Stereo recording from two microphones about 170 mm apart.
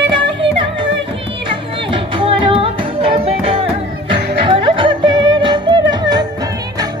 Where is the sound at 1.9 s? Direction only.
30° right (ahead or behind).